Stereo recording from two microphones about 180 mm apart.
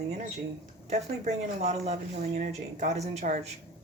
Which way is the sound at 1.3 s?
40° right (ahead or behind).